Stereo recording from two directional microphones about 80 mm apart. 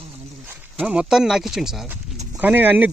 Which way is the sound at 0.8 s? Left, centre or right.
Centre.